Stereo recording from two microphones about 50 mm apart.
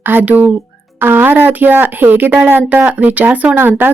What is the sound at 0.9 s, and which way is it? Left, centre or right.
Speech, right.